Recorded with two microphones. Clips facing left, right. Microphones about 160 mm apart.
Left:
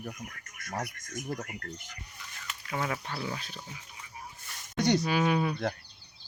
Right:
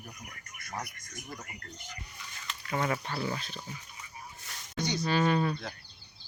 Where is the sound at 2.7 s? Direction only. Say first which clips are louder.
Right 2 dB; centre (ahead or behind).